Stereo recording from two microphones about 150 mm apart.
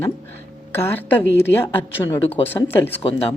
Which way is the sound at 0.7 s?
15° left (ahead or behind).